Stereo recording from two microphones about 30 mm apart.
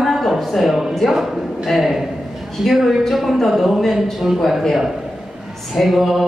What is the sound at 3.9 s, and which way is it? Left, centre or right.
Chant, centre.